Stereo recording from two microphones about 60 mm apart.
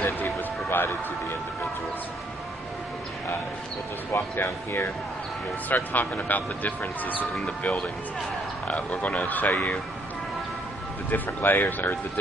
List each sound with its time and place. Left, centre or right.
0.0 s music: left
4.1 s speech: left
11.1 s speech: left